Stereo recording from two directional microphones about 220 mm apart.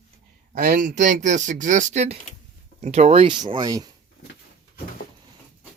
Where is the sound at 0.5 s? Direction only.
40° right (ahead or behind); by 3.9 s 15° right (ahead or behind).